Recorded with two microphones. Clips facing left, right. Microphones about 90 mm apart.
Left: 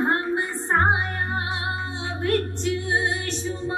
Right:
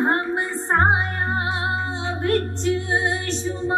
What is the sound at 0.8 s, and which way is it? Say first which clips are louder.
Music: right 2 dB; 30° right (ahead or behind).